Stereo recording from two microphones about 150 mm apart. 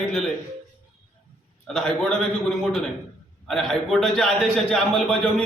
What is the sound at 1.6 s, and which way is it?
A man's voice, 5° left (ahead or behind).